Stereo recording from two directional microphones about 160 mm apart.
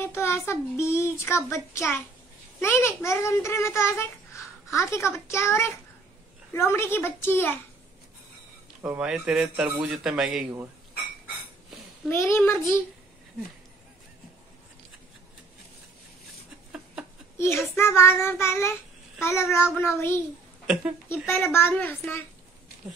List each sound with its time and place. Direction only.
0.0 s a child's voice: 15° left (ahead or behind)
8.8 s a man's voice: 10° right (ahead or behind)
12.1 s a child's voice: 15° left (ahead or behind)
17.4 s a child's voice: 15° left (ahead or behind)
20.6 s speech: 5° right (ahead or behind)
21.1 s a child's voice: 15° left (ahead or behind)